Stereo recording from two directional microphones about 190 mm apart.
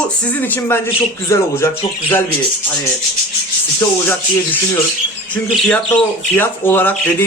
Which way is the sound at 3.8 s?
10° left (ahead or behind).